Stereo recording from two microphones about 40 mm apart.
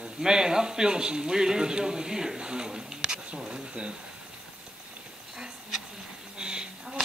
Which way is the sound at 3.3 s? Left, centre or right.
Right.